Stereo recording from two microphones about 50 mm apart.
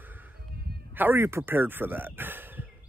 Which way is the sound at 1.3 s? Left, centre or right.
Right.